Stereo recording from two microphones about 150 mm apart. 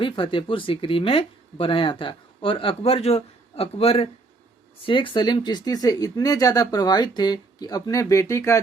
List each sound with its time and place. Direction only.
0.0 s speech: 35° left (ahead or behind); by 8.5 s 20° left (ahead or behind)